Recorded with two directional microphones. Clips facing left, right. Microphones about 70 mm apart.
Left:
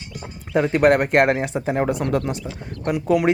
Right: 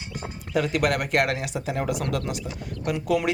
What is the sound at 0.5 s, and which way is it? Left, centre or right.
Speech, left.